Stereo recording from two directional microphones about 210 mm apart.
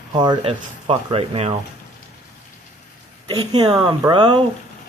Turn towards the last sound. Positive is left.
turn(degrees=-20)  # may be behind; listen again after turning